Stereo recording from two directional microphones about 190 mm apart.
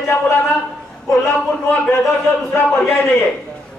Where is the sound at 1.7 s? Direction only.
5° left (ahead or behind).